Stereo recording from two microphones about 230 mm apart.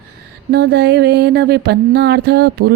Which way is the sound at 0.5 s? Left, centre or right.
Right.